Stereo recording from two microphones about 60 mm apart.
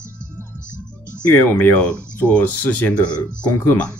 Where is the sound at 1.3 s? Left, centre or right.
Left.